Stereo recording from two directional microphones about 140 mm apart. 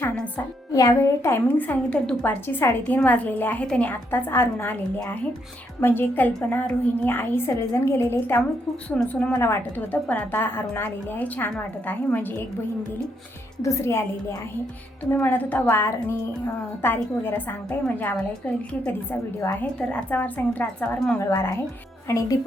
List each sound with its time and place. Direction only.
0.0 s music: 10° left (ahead or behind)
0.7 s a woman's voice: 25° left (ahead or behind)
8.9 s a woman's voice: 5° left (ahead or behind)
13.6 s a woman's voice: 20° left (ahead or behind)
21.2 s a woman's voice: 20° left (ahead or behind)